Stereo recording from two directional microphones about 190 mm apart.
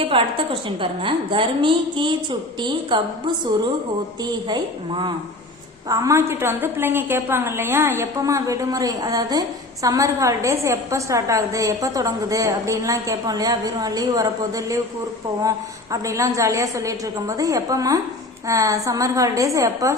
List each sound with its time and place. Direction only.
0.0 s a woman's voice: 30° right (ahead or behind)